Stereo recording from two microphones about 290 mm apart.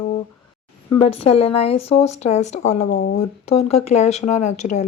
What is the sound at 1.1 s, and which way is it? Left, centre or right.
Speech, centre.